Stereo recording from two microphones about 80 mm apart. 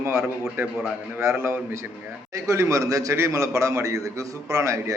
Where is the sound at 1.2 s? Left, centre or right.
Right.